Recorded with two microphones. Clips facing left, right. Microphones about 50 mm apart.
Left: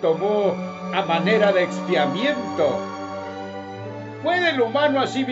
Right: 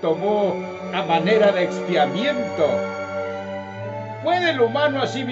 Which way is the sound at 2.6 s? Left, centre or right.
Right.